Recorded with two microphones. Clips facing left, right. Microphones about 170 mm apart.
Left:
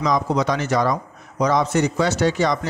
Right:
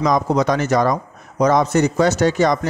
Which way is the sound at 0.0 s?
45° right (ahead or behind).